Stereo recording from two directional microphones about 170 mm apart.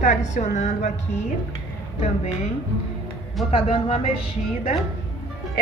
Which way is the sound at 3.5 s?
35° left (ahead or behind).